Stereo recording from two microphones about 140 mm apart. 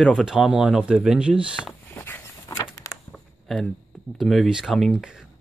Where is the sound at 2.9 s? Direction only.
Centre (ahead or behind).